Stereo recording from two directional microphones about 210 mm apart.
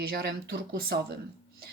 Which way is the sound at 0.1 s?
50° right (ahead or behind).